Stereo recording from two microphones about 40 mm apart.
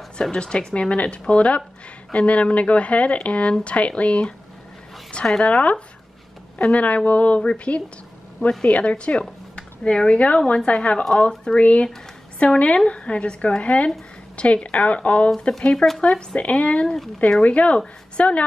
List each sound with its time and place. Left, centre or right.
0.3 s speech: left
5.4 s speech: left
15.6 s speech: centre
16.3 s a woman's voice: left